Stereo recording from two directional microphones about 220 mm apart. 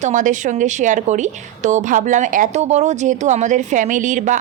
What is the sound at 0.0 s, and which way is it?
A woman's voice, 35° right (ahead or behind).